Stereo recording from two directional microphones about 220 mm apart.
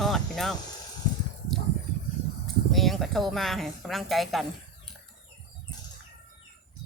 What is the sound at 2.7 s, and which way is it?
A woman's voice, centre (ahead or behind).